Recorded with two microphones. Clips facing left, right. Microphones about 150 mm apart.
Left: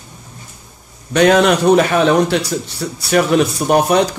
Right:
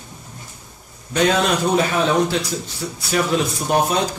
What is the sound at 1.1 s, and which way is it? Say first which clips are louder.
Speech: left 7 dB; 70° left (ahead or behind).